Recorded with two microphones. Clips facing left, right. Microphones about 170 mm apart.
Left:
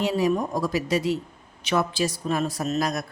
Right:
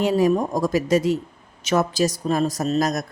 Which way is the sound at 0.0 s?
45° right (ahead or behind).